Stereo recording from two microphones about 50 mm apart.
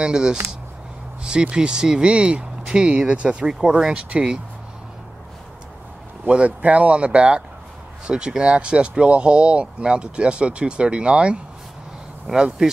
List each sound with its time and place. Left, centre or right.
0.0 s speech: centre
6.2 s speech: right